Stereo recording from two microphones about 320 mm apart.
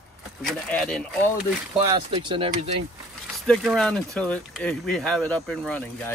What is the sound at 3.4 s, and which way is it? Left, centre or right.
Speech, centre.